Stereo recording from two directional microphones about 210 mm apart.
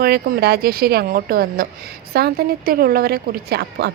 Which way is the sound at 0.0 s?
50° right (ahead or behind).